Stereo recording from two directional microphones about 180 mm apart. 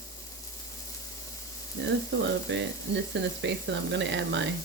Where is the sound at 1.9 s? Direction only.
80° right.